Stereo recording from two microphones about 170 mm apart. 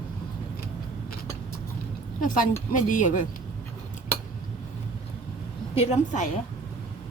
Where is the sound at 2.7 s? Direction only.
50° left (ahead or behind).